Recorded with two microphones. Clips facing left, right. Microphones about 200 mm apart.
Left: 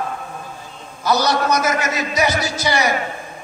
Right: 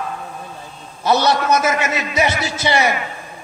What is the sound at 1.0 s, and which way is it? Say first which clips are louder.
A man's voice: right 2 dB; 25° right (ahead or behind).